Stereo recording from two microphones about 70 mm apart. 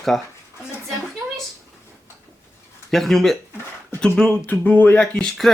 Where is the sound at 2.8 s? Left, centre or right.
Centre.